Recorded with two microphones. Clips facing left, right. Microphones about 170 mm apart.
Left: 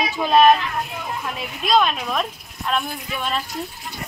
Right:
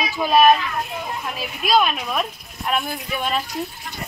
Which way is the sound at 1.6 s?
5° right (ahead or behind).